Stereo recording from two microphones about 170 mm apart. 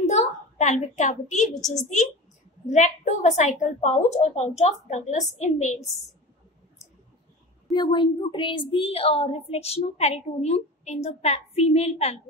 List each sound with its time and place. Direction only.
0.0 s a sound: 40° left (ahead or behind)
2.6 s a woman's voice: 45° left (ahead or behind)
7.7 s speech: 30° left (ahead or behind)